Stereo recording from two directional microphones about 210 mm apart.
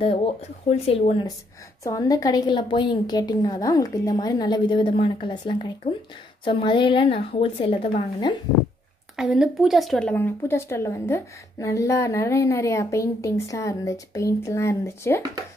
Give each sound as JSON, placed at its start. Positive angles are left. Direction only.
{"t": 0.7, "sound": "a woman's voice", "side_deg": 30}
{"t": 1.8, "sound": "a woman's voice", "side_deg": 15}
{"t": 9.1, "sound": "speech", "side_deg": 0}